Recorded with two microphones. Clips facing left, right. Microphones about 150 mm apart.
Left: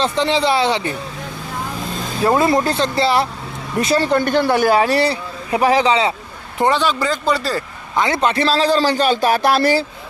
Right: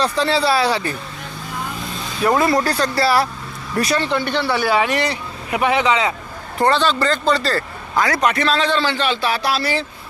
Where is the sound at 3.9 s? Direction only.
45° left (ahead or behind).